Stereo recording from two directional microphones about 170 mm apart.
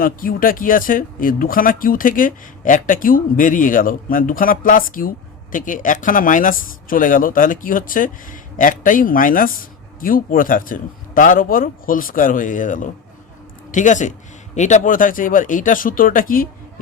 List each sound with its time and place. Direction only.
0.0 s speech: 55° left (ahead or behind)